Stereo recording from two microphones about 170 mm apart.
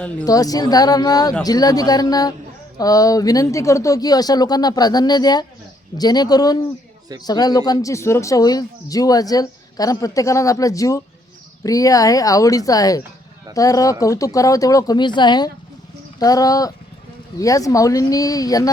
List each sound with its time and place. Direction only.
0.3 s speech: 20° left (ahead or behind)